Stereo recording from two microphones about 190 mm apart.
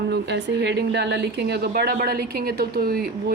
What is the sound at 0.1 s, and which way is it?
Speech, 65° right (ahead or behind).